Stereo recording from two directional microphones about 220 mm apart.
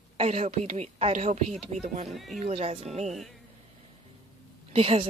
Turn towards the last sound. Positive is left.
turn(degrees=-25)  # may be behind; listen again after turning